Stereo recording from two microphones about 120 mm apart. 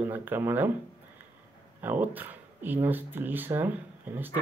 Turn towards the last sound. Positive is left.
turn(degrees=-15)  # may be behind; listen again after turning